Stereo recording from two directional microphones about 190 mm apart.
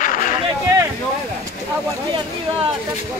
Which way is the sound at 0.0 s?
45° left (ahead or behind).